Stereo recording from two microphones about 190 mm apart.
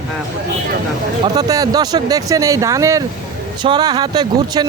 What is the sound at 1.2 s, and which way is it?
Speech, 20° right (ahead or behind).